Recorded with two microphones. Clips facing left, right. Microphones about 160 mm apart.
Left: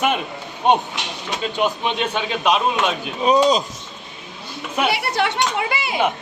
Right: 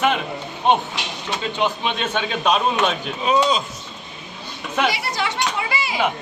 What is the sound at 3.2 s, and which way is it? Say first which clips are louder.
Speech: left 3 dB; 40° left (ahead or behind).